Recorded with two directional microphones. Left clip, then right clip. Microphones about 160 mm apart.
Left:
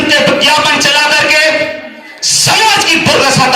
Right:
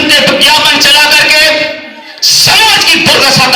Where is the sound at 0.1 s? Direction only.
25° left (ahead or behind).